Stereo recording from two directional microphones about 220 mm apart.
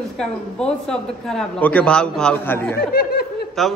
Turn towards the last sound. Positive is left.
turn(degrees=0)  # may be behind; listen again after turning